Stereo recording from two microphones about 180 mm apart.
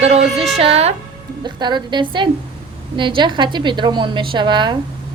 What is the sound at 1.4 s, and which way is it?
A woman's voice, 25° right (ahead or behind).